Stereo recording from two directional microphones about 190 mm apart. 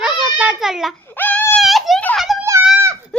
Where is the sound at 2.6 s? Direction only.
10° right (ahead or behind).